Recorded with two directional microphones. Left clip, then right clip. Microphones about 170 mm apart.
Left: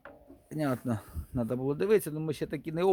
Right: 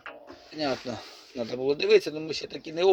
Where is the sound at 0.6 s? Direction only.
30° left (ahead or behind).